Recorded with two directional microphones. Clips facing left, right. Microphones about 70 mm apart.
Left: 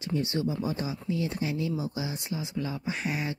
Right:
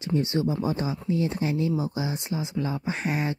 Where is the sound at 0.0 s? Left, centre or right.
Right.